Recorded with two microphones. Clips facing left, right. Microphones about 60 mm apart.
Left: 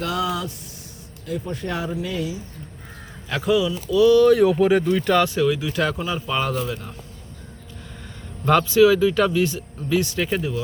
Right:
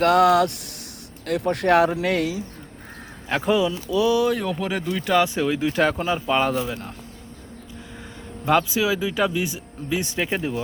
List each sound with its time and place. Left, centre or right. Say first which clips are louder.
0.0 s speech: right 9 dB; right
3.2 s speech: even; right
4.2 s speech: left 8 dB; centre
5.2 s speech: left 1 dB; right
8.4 s speech: left 5 dB; centre; by 10.6 s right